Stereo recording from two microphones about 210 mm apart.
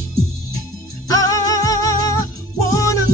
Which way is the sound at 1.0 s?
15° left (ahead or behind).